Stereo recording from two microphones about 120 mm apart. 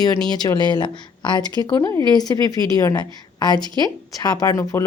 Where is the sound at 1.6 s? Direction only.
25° left (ahead or behind).